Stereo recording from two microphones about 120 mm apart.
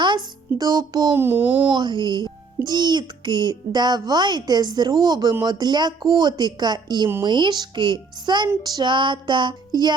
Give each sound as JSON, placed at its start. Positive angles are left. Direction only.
{"t": 0.6, "sound": "a child's voice", "side_deg": -35}
{"t": 1.1, "sound": "a child's voice", "side_deg": -20}
{"t": 1.7, "sound": "a child's voice", "side_deg": -40}